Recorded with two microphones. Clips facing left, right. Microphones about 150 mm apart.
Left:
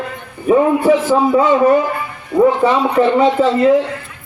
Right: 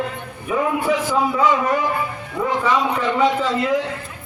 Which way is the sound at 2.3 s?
40° left (ahead or behind).